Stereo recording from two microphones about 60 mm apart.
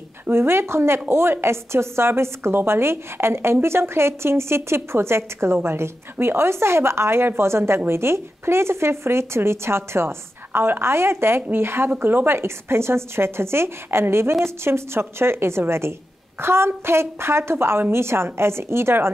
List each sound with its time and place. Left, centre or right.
0.3 s a woman's voice: right